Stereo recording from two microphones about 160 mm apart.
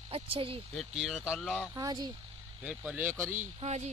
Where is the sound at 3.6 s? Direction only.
45° right (ahead or behind).